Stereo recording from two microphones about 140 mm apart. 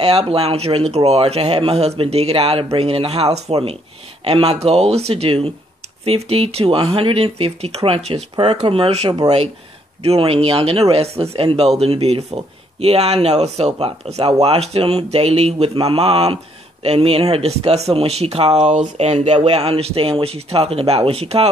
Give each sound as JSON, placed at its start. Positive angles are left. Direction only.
{"t": 0.0, "sound": "speech", "side_deg": -45}